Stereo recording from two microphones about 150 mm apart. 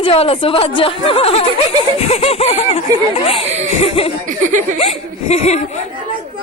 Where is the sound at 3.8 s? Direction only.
40° left (ahead or behind).